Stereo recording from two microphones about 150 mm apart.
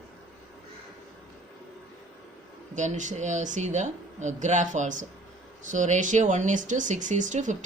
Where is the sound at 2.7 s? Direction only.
55° right (ahead or behind).